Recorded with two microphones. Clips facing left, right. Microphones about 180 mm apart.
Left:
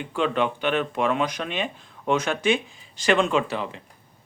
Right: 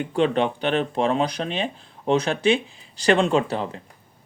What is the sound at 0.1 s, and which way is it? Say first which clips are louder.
Speech: right 2 dB; 35° right (ahead or behind).